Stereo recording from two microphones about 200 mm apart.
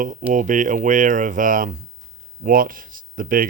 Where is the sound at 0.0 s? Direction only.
40° right (ahead or behind).